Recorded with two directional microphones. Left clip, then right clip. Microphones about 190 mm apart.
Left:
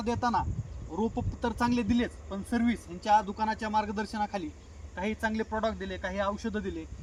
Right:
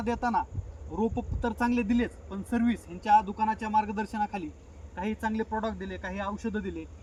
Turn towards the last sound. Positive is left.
turn(degrees=-10)  # may be behind; listen again after turning